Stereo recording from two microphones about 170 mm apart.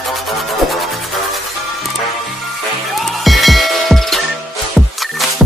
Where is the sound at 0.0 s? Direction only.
Centre (ahead or behind).